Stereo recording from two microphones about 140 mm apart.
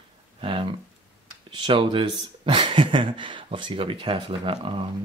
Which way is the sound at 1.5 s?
35° right (ahead or behind).